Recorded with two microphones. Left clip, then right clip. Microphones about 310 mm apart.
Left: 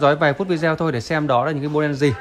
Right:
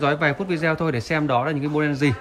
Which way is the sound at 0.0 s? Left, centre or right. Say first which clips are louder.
Left 5 dB; centre.